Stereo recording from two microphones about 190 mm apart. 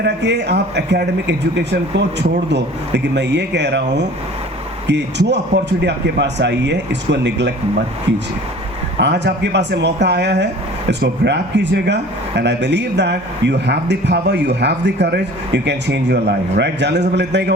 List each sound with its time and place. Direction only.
0.0 s a man's voice: 65° right (ahead or behind)
9.0 s a man's voice: 65° right (ahead or behind)